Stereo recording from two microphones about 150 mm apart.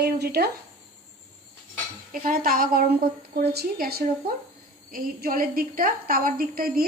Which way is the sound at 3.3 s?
90° right.